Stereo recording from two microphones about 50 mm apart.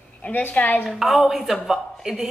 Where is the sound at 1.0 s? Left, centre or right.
Centre.